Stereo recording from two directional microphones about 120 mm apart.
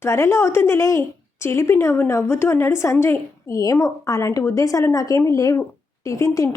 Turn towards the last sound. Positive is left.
turn(degrees=25)  # may be behind; listen again after turning